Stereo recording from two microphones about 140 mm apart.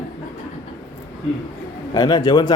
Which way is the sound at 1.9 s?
30° left (ahead or behind).